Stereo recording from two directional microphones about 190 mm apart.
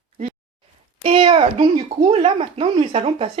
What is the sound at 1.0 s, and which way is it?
Speech, 30° right (ahead or behind).